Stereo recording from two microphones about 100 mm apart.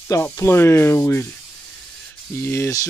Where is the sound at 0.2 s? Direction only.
25° left (ahead or behind).